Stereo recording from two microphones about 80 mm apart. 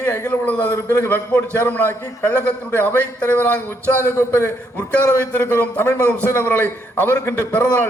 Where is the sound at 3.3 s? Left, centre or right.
Centre.